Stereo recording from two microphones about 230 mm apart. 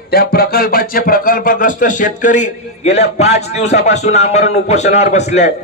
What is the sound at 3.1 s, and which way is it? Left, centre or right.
A man's voice, left.